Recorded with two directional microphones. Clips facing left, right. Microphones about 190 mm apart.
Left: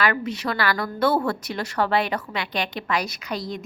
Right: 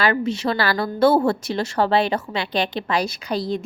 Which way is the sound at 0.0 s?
30° right (ahead or behind).